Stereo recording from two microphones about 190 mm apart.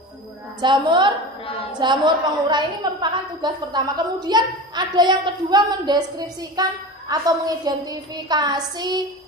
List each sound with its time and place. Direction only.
0.6 s a woman's voice: 25° right (ahead or behind)